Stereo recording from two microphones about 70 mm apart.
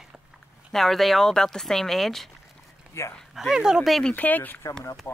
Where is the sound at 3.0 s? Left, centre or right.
Left.